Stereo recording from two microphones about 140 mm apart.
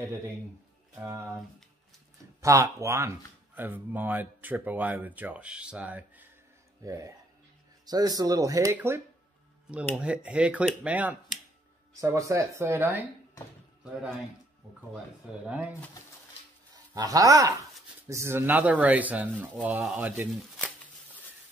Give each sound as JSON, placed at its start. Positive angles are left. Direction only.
{"t": 1.0, "sound": "speech", "side_deg": -20}
{"t": 2.4, "sound": "speech", "side_deg": -20}
{"t": 6.8, "sound": "speech", "side_deg": -20}
{"t": 12.0, "sound": "speech", "side_deg": -20}
{"t": 14.6, "sound": "speech", "side_deg": -5}
{"t": 16.9, "sound": "speech", "side_deg": -25}